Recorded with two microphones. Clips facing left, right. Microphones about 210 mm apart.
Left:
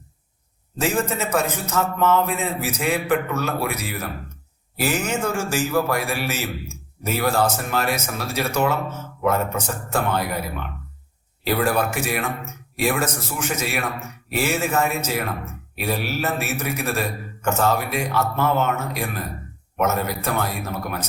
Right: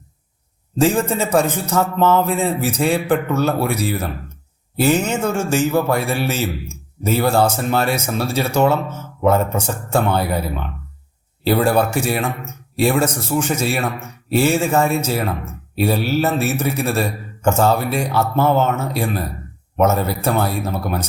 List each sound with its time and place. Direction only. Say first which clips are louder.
0.8 s a man's voice: right 6 dB; 30° right (ahead or behind)